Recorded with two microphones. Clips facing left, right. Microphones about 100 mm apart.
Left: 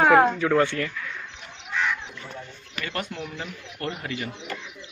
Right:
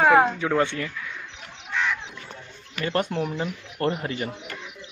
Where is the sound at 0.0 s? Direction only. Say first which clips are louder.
Even; 5° right (ahead or behind).